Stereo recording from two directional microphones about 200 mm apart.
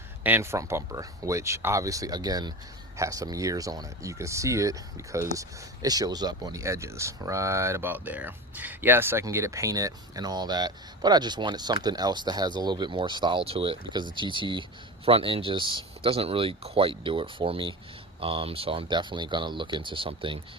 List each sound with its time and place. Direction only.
0.2 s speech: 10° right (ahead or behind); by 20.4 s 25° right (ahead or behind)